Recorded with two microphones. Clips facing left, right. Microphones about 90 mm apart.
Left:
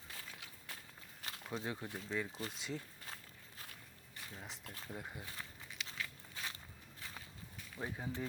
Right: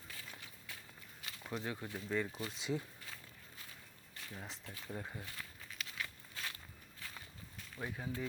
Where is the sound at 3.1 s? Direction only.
45° left (ahead or behind).